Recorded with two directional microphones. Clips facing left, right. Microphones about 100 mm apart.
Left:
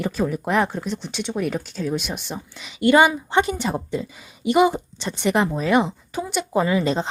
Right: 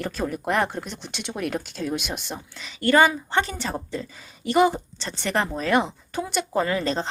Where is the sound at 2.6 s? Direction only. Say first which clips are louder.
Left 3 dB; 15° left (ahead or behind).